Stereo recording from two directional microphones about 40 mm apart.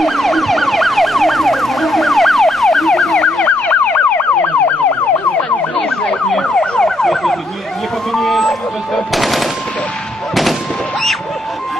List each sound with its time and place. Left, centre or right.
0.0 s emergency vehicle: centre
3.4 s emergency vehicle: left
6.4 s emergency vehicle: centre
7.0 s ambulance: centre
8.1 s machine gun: centre